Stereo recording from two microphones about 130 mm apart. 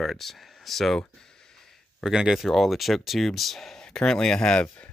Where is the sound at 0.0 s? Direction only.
Centre (ahead or behind).